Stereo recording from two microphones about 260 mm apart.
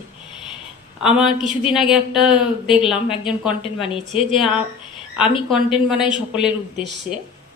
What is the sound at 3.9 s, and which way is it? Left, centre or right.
Speech, left.